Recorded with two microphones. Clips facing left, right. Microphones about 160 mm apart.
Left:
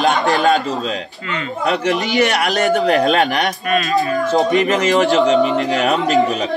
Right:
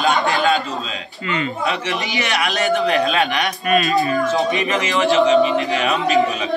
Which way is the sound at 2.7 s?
45° left (ahead or behind).